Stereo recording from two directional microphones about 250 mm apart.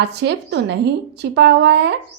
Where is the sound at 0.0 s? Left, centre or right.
Right.